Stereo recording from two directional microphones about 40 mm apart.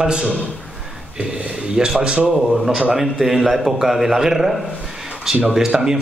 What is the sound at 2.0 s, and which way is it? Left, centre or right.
Speech, right.